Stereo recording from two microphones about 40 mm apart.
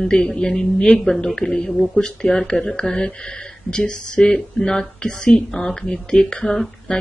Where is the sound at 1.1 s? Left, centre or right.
Centre.